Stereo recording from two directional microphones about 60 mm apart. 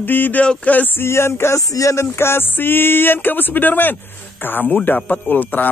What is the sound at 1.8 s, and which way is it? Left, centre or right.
Speech, left.